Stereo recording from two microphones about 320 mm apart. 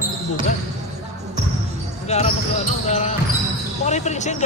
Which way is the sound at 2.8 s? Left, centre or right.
Left.